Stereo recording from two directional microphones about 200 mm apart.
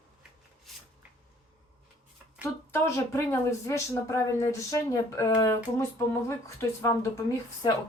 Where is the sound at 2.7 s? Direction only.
15° left (ahead or behind).